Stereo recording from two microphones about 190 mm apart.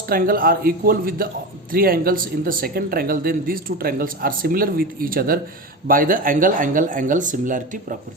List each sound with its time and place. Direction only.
0.1 s speech: 50° right (ahead or behind)